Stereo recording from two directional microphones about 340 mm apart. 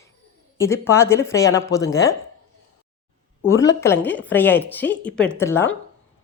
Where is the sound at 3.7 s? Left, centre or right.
Centre.